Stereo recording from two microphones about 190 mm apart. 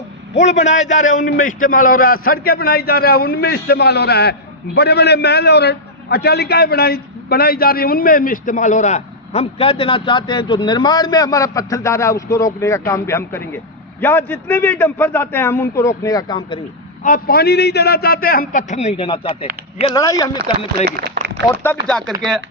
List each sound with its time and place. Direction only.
0.3 s a man's voice: 40° left (ahead or behind); by 16.6 s 20° left (ahead or behind)
17.0 s a man's voice: 50° left (ahead or behind); by 19.9 s 30° left (ahead or behind)
19.9 s speech: 20° left (ahead or behind)
20.8 s speech: 55° right (ahead or behind)
21.5 s a man's voice: 10° left (ahead or behind)